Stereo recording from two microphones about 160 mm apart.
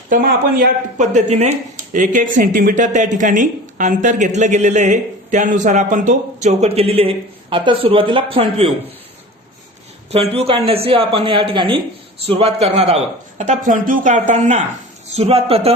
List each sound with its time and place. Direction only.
0.1 s a man's voice: 60° right (ahead or behind); by 8.7 s 35° right (ahead or behind)
10.1 s a man's voice: 40° right (ahead or behind)
13.4 s a man's voice: 55° right (ahead or behind); by 15.7 s 35° right (ahead or behind)